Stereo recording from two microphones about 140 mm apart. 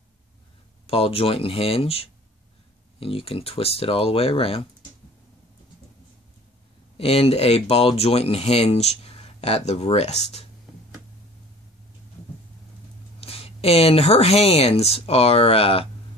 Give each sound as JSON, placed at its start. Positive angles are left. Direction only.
{"t": 0.8, "sound": "speech", "side_deg": 45}
{"t": 7.0, "sound": "speech", "side_deg": 45}
{"t": 13.2, "sound": "speech", "side_deg": 45}